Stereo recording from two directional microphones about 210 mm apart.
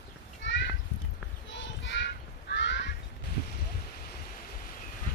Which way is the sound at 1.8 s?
55° left (ahead or behind).